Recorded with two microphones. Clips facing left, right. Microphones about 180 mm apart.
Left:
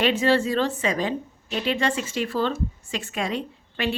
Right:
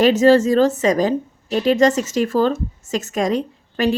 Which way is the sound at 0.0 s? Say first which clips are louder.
Right 8 dB; 40° right (ahead or behind).